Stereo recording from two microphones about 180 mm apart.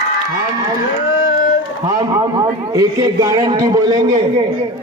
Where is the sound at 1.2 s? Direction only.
50° left (ahead or behind).